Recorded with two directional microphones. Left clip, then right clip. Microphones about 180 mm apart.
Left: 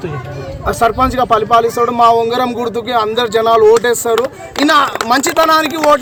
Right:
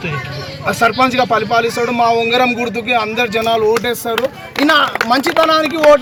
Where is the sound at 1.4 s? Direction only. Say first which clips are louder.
Left 3 dB; 20° left (ahead or behind).